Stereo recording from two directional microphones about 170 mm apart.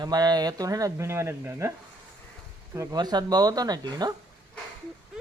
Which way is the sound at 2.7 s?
20° right (ahead or behind).